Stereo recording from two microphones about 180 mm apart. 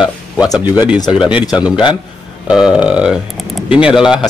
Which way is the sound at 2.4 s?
5° right (ahead or behind).